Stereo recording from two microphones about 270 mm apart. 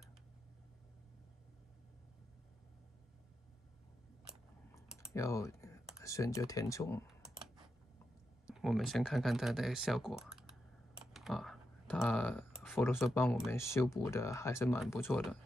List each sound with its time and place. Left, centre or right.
5.1 s speech: centre
7.1 s computer keyboard: centre
8.5 s speech: centre
11.1 s a sound: centre
13.1 s speech: centre